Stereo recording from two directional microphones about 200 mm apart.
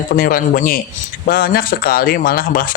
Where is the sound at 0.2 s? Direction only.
45° left (ahead or behind).